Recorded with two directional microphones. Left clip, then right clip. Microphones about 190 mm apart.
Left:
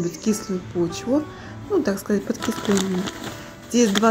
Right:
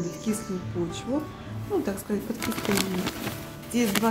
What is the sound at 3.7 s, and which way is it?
Music, 20° left (ahead or behind).